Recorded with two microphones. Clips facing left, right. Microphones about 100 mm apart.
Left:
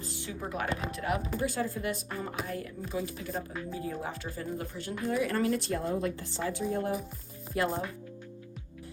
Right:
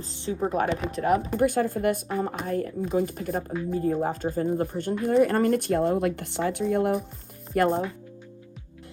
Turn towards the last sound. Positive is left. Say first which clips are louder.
# right 8 dB
turn(degrees=-55)  # may be behind; listen again after turning